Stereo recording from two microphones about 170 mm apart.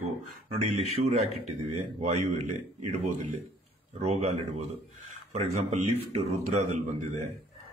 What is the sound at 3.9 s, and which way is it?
Speech, 40° right (ahead or behind).